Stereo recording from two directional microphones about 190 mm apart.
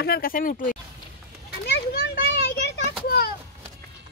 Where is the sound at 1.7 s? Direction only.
60° left (ahead or behind).